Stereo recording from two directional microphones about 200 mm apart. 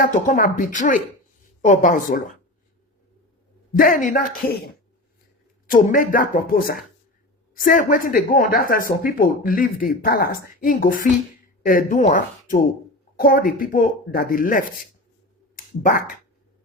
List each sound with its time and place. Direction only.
0.0 s speech: 40° left (ahead or behind)
3.7 s speech: 45° left (ahead or behind)
5.6 s speech: 45° left (ahead or behind)